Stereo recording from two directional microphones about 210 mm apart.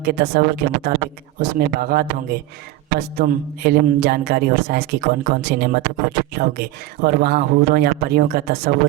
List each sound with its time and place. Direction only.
0.0 s a man's voice: 45° right (ahead or behind)